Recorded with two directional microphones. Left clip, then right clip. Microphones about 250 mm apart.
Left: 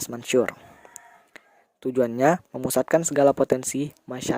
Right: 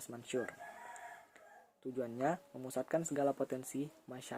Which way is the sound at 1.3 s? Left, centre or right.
Left.